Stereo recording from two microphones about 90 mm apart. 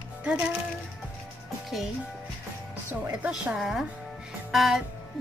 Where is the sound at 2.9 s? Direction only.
15° right (ahead or behind).